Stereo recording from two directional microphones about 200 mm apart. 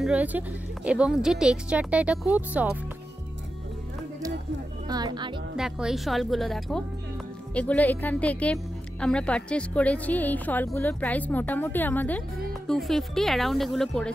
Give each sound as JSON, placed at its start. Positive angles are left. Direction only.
{"t": 0.0, "sound": "speech", "side_deg": -5}
{"t": 4.8, "sound": "speech", "side_deg": -20}
{"t": 5.6, "sound": "a woman's voice", "side_deg": 0}